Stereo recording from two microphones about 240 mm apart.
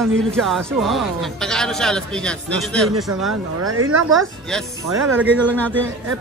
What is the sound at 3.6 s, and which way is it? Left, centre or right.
Speech, right.